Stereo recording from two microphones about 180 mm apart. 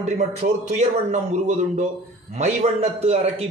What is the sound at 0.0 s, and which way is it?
A man's voice, 40° right (ahead or behind).